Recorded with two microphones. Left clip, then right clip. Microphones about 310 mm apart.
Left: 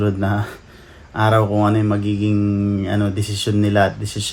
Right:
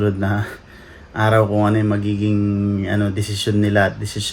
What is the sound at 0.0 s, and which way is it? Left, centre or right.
Speech, centre.